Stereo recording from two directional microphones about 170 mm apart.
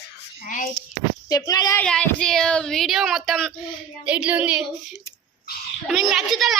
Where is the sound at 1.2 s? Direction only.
20° left (ahead or behind).